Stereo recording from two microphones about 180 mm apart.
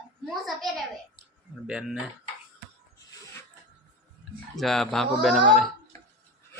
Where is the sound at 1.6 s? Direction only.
5° right (ahead or behind).